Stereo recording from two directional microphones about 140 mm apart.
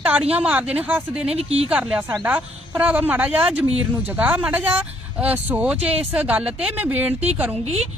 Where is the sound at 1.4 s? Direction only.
50° right (ahead or behind).